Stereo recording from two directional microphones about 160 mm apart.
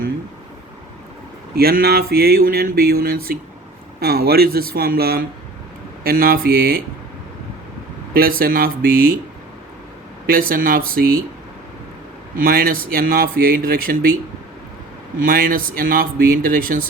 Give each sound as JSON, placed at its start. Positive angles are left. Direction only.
{"t": 1.5, "sound": "mantra", "side_deg": -75}
{"t": 8.1, "sound": "speech", "side_deg": -65}
{"t": 10.2, "sound": "speech", "side_deg": -60}
{"t": 12.4, "sound": "speech", "side_deg": -65}
{"t": 15.2, "sound": "speech", "side_deg": -60}